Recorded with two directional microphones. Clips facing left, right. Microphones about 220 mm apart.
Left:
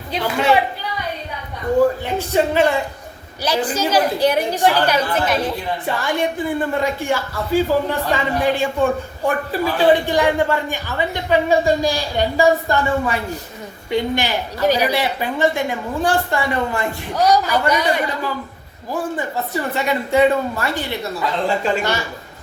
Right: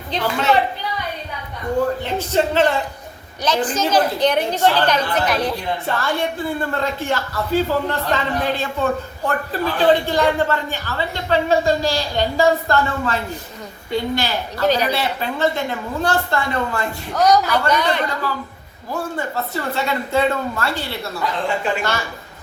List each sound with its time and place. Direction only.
0.1 s speech: 10° left (ahead or behind)
2.0 s speech: 10° left (ahead or behind)
5.9 s speech: 15° left (ahead or behind)